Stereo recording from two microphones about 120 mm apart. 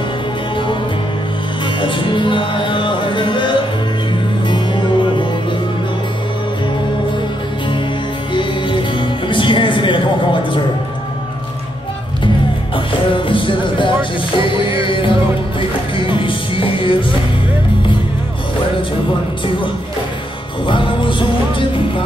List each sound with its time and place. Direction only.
1.8 s music: 45° left (ahead or behind)
8.3 s music: 40° left (ahead or behind)
12.7 s music: 45° left (ahead or behind)
20.6 s music: 45° left (ahead or behind)